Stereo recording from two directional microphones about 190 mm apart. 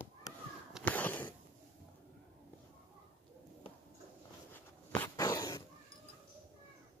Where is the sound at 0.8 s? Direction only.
10° left (ahead or behind).